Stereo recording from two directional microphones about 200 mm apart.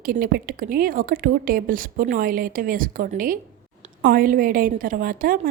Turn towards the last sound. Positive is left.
turn(degrees=-45)  # may be behind; listen again after turning